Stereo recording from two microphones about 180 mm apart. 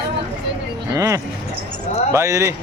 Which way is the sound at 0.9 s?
15° right (ahead or behind).